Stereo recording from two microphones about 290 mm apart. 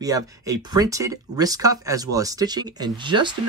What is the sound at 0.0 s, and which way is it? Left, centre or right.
Speech, centre.